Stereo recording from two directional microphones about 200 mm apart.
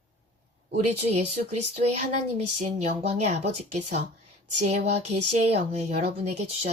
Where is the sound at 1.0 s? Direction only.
30° right (ahead or behind).